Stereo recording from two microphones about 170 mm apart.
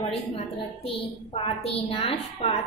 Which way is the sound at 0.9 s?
35° left (ahead or behind).